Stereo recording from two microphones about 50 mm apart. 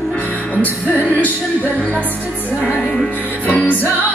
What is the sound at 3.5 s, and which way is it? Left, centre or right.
Music, left.